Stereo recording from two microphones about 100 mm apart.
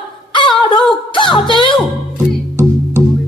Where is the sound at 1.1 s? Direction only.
55° left (ahead or behind).